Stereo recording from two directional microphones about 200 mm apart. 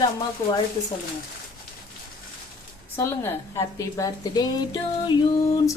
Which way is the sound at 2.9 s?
15° left (ahead or behind).